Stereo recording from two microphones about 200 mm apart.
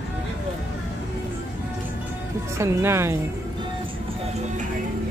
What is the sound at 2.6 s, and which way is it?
Speech, 15° right (ahead or behind).